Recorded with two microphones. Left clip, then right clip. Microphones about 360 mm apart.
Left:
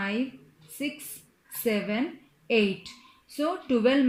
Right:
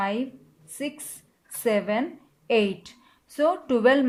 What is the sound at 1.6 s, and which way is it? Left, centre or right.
A woman's voice, right.